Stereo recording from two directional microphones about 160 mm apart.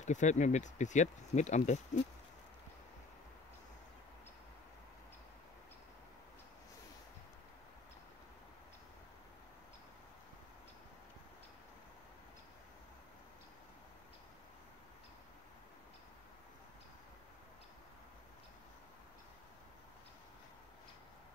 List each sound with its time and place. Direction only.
0.0 s speech: 50° left (ahead or behind)